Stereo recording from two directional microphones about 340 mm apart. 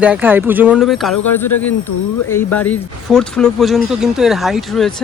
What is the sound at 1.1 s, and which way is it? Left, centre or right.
Speech, left.